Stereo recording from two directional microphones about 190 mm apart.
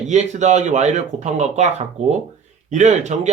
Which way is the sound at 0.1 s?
40° right (ahead or behind).